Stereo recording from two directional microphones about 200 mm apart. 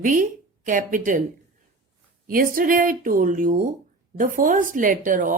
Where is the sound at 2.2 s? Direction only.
45° right (ahead or behind).